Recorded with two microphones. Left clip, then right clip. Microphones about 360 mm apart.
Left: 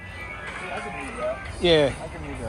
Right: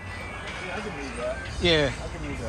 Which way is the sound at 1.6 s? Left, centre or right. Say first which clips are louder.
Left 3 dB; centre.